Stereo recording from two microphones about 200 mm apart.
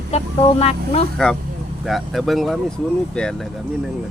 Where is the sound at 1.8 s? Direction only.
Centre (ahead or behind).